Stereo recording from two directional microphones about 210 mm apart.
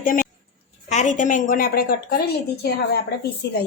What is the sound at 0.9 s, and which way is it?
A woman's voice, 35° left (ahead or behind).